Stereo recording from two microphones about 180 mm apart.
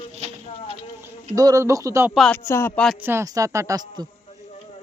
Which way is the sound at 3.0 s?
15° right (ahead or behind).